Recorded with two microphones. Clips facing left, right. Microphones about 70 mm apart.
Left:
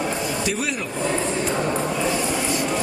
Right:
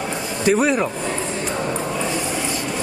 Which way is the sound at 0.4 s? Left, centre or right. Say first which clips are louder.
Right 8 dB; right.